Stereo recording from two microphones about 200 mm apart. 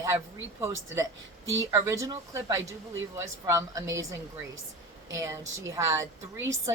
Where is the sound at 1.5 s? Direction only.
15° right (ahead or behind).